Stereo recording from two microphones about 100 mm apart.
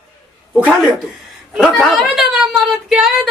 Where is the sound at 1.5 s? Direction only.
5° left (ahead or behind).